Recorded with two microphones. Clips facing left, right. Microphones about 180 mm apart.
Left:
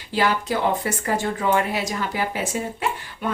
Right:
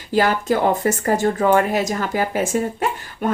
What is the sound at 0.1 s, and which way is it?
Speech, 45° right (ahead or behind).